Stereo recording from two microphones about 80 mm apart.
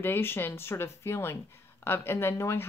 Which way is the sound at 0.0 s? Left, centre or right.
Left.